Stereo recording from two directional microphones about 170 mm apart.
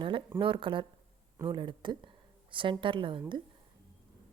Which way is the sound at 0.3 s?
30° right (ahead or behind).